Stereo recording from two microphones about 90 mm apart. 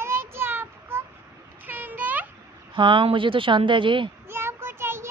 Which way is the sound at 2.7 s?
70° right (ahead or behind).